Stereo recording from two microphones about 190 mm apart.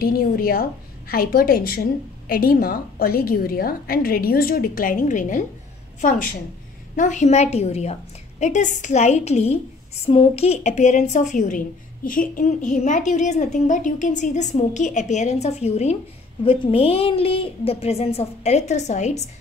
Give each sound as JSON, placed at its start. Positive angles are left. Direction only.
{"t": 0.0, "sound": "a woman's voice", "side_deg": 50}